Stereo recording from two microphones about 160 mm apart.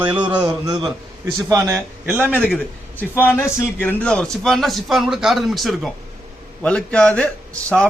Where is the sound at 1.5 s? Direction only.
20° right (ahead or behind).